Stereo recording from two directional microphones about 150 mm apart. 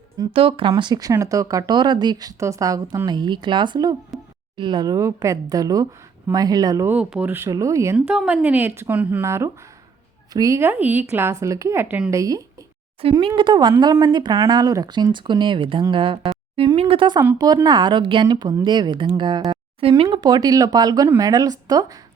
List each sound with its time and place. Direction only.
0.3 s speech: 35° right (ahead or behind)
4.1 s a sound: centre (ahead or behind)
4.5 s speech: 30° right (ahead or behind)
6.9 s speech: 5° right (ahead or behind)
7.9 s speech: 5° right (ahead or behind)
12.1 s speech: 20° right (ahead or behind)
13.0 s speech: 35° right (ahead or behind)